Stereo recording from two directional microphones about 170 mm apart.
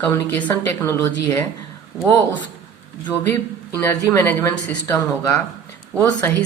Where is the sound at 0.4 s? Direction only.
20° left (ahead or behind).